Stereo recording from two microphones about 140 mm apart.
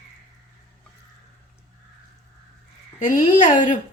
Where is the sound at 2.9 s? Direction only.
70° left (ahead or behind).